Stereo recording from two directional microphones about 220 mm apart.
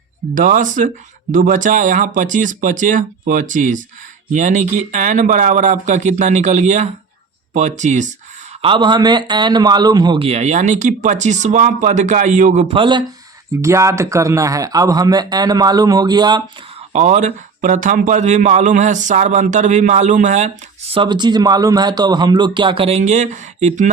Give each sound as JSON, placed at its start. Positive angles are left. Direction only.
{"t": 0.3, "sound": "a man's voice", "side_deg": -35}
{"t": 8.6, "sound": "a man's voice", "side_deg": -20}
{"t": 16.9, "sound": "a man's voice", "side_deg": -30}
{"t": 20.9, "sound": "a man's voice", "side_deg": -20}